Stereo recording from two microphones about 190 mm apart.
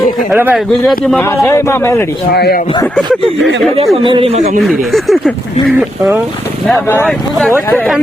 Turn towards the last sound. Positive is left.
turn(degrees=10)  # may be behind; listen again after turning